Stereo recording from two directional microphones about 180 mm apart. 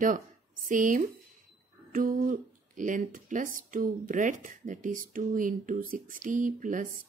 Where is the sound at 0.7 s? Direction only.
45° right (ahead or behind).